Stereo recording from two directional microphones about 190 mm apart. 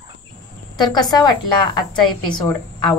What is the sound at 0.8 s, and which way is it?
A woman's voice, 20° left (ahead or behind).